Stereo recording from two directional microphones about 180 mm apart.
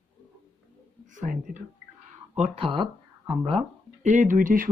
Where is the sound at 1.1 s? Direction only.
45° right (ahead or behind).